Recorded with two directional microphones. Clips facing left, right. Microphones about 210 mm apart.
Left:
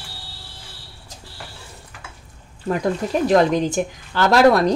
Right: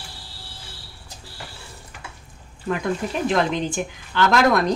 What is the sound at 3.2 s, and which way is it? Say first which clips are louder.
Speech: left 6 dB; 40° left (ahead or behind).